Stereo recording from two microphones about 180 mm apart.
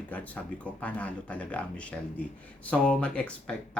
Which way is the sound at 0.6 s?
10° left (ahead or behind).